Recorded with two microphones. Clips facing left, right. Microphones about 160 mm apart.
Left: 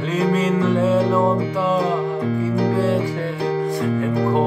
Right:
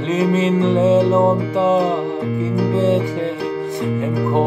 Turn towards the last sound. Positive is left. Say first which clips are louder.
# right 2 dB
turn(degrees=-25)  # may be behind; listen again after turning